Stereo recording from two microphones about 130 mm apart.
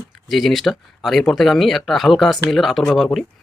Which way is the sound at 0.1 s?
Centre (ahead or behind).